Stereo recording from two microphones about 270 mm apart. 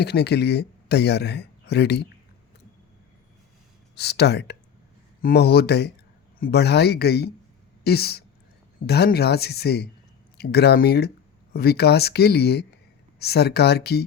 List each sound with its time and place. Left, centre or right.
0.0 s speech: left
3.9 s speech: left